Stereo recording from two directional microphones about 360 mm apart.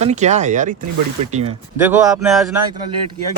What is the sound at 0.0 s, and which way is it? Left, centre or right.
Speech, centre.